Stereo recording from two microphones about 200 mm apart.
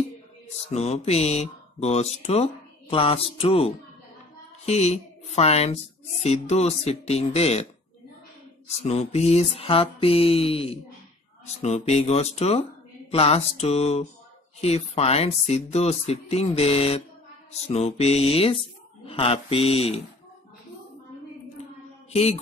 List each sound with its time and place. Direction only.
0.7 s speech: 30° left (ahead or behind)
3.3 s mantra: 30° left (ahead or behind)
4.6 s speech: 35° left (ahead or behind)
8.8 s mantra: 30° left (ahead or behind)
11.6 s speech: 35° left (ahead or behind)
19.0 s mantra: 30° left (ahead or behind)
22.1 s music: 30° left (ahead or behind)